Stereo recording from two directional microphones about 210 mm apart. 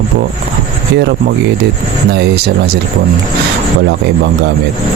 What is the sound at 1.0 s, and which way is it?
Speech, 50° right (ahead or behind).